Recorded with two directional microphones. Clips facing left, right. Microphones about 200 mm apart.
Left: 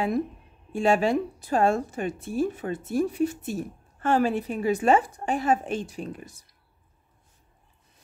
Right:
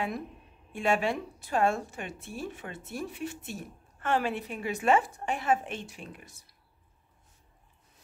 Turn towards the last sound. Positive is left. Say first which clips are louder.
# left 9 dB
turn(degrees=40)  # may be behind; listen again after turning